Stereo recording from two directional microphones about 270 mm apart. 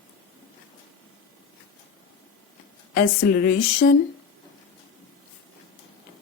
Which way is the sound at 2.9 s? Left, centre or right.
Left.